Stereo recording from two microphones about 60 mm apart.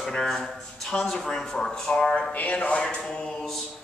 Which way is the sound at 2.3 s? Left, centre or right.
Left.